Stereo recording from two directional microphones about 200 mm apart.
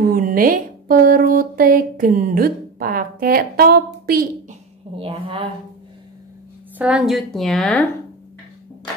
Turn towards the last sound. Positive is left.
turn(degrees=5)  # may be behind; listen again after turning